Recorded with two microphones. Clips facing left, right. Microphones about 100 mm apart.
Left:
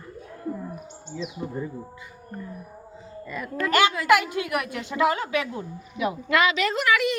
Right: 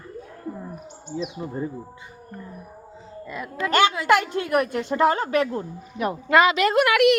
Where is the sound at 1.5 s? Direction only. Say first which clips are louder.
Right 2 dB; 25° right (ahead or behind).